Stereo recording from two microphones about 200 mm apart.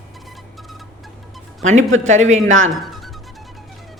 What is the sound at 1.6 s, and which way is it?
Speech, 35° right (ahead or behind).